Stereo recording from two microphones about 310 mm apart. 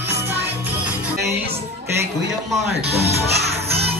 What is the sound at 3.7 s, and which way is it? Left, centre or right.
Music, centre.